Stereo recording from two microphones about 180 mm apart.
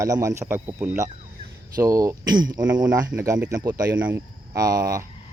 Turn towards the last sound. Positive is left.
turn(degrees=-20)  # may be behind; listen again after turning